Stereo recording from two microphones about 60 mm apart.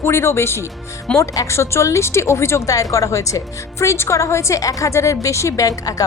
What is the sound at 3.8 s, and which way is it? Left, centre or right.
A woman's voice, left.